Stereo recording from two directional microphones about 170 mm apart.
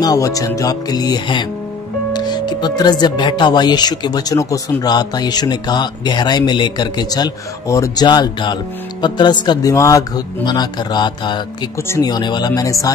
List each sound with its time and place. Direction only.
0.0 s speech: 20° left (ahead or behind)